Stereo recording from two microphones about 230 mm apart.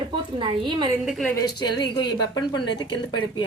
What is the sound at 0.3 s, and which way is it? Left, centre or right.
Speech, right.